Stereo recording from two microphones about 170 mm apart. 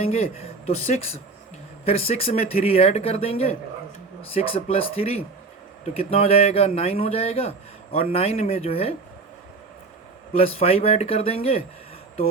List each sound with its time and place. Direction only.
0.0 s a man's voice: 35° left (ahead or behind)
10.3 s a man's voice: 35° left (ahead or behind)